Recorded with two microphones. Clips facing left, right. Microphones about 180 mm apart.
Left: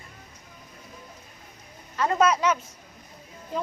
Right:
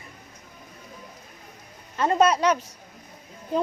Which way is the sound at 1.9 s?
25° right (ahead or behind).